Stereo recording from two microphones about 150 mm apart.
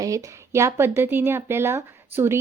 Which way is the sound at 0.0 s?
20° right (ahead or behind).